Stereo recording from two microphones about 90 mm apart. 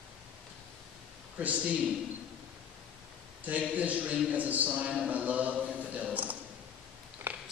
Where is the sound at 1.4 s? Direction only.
15° right (ahead or behind).